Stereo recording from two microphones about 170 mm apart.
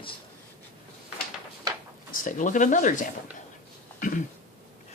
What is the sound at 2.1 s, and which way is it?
Speech, 50° left (ahead or behind).